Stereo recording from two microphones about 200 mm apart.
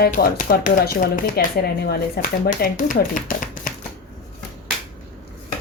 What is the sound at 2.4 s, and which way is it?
A woman's voice, 45° left (ahead or behind).